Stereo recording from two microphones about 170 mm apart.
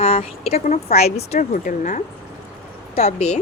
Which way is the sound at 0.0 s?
35° left (ahead or behind).